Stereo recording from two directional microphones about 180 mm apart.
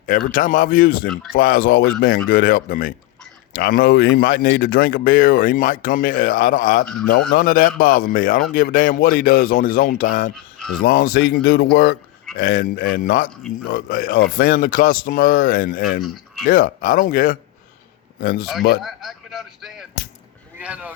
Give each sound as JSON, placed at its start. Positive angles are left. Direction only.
{"t": 0.0, "sound": "speech", "side_deg": 50}
{"t": 6.8, "sound": "a man's voice", "side_deg": 5}
{"t": 7.3, "sound": "speech", "side_deg": 50}
{"t": 10.3, "sound": "music", "side_deg": 0}
{"t": 10.8, "sound": "speech", "side_deg": 55}
{"t": 16.0, "sound": "a sound", "side_deg": 0}
{"t": 16.5, "sound": "speech", "side_deg": 50}
{"t": 18.8, "sound": "a sound", "side_deg": 0}
{"t": 20.6, "sound": "speech", "side_deg": -10}